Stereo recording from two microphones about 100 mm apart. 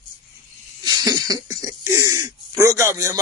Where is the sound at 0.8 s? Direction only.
40° right (ahead or behind).